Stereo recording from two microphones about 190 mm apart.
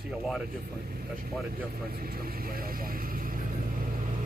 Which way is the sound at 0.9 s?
50° right (ahead or behind).